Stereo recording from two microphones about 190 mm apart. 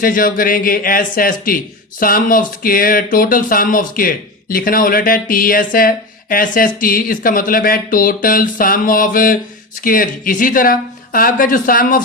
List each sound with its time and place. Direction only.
0.0 s speech: 45° left (ahead or behind)